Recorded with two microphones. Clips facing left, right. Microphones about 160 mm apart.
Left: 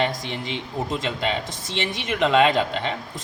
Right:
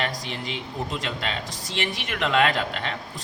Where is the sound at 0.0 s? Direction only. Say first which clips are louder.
Left 4 dB; 20° left (ahead or behind).